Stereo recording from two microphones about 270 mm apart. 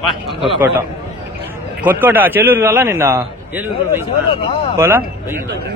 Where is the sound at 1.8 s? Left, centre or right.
Centre.